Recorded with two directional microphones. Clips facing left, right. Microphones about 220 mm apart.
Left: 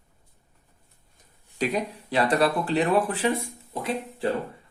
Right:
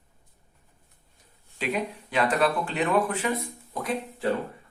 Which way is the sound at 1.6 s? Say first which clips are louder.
Left 2 dB; 40° left (ahead or behind).